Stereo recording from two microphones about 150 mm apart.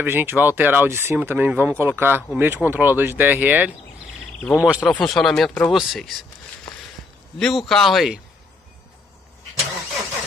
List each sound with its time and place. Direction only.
0.0 s speech: 15° right (ahead or behind)
4.4 s speech: 10° left (ahead or behind)
4.6 s speech: 5° right (ahead or behind)
7.3 s speech: 5° left (ahead or behind)